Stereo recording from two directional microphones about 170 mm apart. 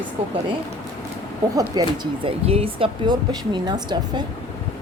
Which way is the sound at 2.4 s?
35° right (ahead or behind).